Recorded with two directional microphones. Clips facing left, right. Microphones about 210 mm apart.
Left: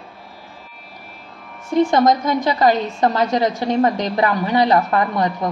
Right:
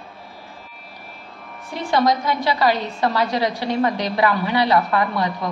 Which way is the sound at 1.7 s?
45° left (ahead or behind).